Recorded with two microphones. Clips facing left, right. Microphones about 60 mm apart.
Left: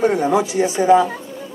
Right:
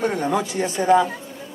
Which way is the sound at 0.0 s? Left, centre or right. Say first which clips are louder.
Left 5 dB; centre.